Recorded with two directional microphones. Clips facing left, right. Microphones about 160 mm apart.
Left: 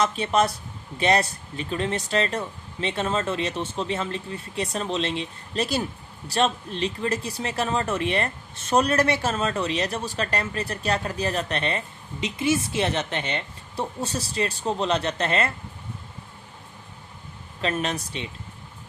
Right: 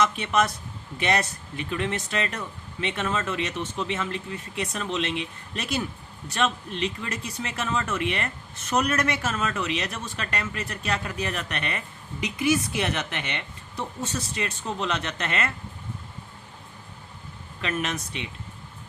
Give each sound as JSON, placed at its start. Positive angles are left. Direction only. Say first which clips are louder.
{"t": 0.0, "sound": "speech", "louder": "left 2 dB", "side_deg": 30}
{"t": 17.6, "sound": "speech", "louder": "left 3 dB", "side_deg": 30}